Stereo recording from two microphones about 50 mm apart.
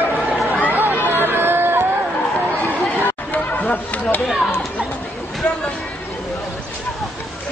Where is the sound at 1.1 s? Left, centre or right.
Right.